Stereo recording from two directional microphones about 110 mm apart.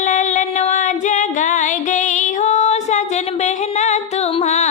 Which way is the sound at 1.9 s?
90° left.